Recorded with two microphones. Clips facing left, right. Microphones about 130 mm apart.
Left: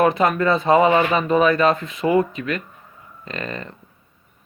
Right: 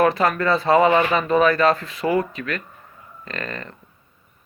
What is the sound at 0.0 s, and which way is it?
Speech, 20° left (ahead or behind).